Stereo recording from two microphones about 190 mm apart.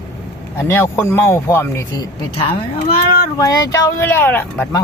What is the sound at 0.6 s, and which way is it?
Speech, 10° left (ahead or behind).